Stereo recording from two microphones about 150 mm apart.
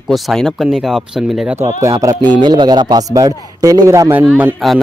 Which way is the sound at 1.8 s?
20° right (ahead or behind).